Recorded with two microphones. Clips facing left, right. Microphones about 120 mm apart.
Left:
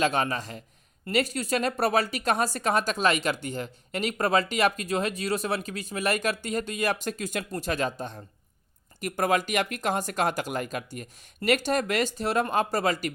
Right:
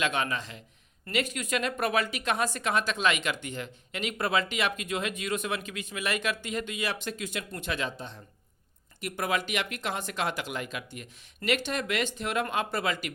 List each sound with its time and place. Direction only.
0.0 s a woman's voice: 40° left (ahead or behind)